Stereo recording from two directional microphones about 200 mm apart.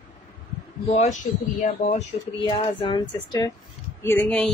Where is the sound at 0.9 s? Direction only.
35° left (ahead or behind).